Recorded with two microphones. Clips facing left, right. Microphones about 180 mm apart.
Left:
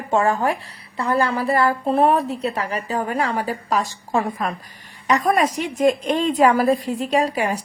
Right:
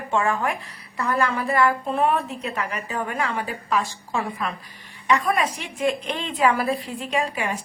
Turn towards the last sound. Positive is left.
turn(degrees=35)  # may be behind; listen again after turning